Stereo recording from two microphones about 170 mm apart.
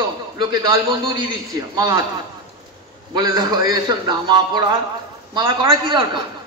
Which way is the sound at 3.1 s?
20° right (ahead or behind).